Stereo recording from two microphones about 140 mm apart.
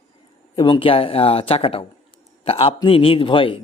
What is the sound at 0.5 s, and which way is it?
A man's voice, 35° left (ahead or behind).